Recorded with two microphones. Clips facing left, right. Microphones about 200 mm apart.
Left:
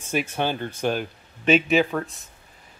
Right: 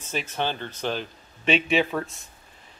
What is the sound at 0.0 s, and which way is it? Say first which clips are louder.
Speech: left 4 dB; 10° left (ahead or behind).